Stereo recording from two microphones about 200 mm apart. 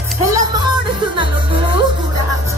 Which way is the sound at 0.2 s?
15° right (ahead or behind).